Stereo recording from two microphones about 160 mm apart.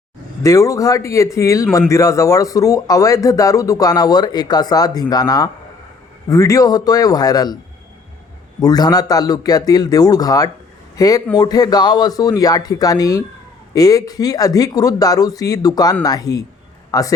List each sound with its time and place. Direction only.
0.4 s a man's voice: 20° left (ahead or behind)
8.6 s a man's voice: 25° left (ahead or behind)